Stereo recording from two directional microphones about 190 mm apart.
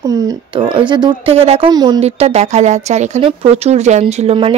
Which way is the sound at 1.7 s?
20° right (ahead or behind).